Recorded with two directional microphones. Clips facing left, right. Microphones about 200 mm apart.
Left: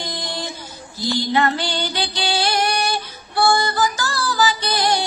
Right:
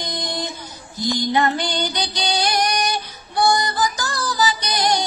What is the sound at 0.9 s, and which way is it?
Music, 15° right (ahead or behind).